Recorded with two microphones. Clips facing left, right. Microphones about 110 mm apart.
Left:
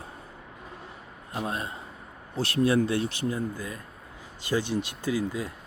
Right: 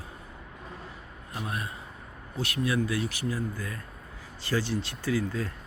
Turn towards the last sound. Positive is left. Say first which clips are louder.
# left 1 dB
turn(degrees=15)  # may be behind; listen again after turning